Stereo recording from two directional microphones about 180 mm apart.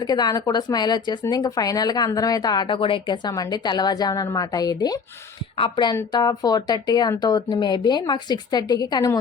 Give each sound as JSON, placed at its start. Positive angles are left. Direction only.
{"t": 0.0, "sound": "speech", "side_deg": 25}